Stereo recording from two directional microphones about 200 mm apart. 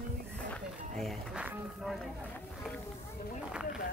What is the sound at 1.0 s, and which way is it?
Speech, centre (ahead or behind).